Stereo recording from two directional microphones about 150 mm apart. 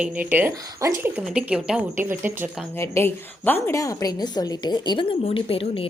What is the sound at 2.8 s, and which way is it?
A woman's voice, 15° left (ahead or behind).